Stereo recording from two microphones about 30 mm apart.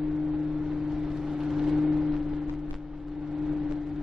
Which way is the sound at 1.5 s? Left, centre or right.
Centre.